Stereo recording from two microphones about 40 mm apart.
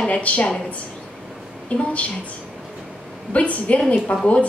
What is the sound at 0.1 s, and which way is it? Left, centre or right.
Speech, left.